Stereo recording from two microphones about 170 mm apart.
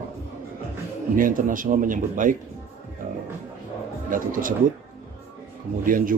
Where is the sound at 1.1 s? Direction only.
55° right (ahead or behind).